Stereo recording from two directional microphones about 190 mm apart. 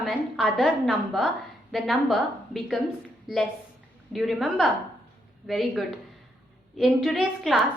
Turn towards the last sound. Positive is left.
turn(degrees=0)  # may be behind; listen again after turning